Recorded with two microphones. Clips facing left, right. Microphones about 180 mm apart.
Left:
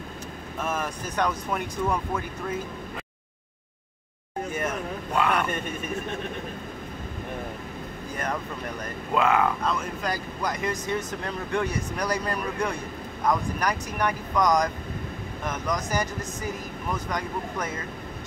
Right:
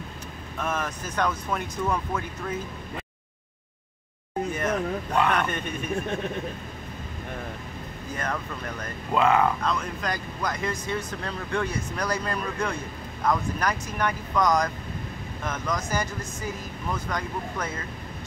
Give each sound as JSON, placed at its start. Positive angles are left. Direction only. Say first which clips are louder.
{"t": 0.6, "sound": "speech", "louder": "even", "side_deg": 10}
{"t": 4.5, "sound": "a sound", "louder": "right 3 dB", "side_deg": 10}
{"t": 9.1, "sound": "speech", "louder": "right 1 dB", "side_deg": 0}